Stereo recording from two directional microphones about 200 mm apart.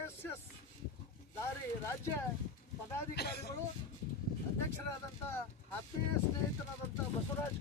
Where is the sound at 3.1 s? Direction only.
55° left (ahead or behind).